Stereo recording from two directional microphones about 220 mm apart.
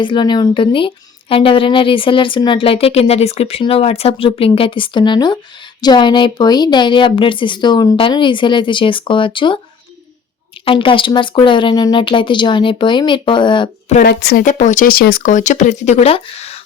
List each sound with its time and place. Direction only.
0.0 s a woman's voice: 20° left (ahead or behind)
10.7 s a woman's voice: 25° left (ahead or behind)
14.0 s a woman's voice: 50° left (ahead or behind)
14.4 s speech: 35° left (ahead or behind)